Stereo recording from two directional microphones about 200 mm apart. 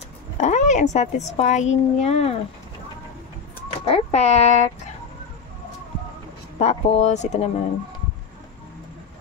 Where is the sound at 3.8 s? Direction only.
30° left (ahead or behind).